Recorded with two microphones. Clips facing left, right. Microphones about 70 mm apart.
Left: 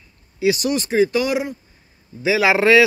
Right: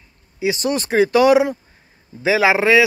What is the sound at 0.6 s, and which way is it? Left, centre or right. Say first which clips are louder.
Speech: right 1 dB; right.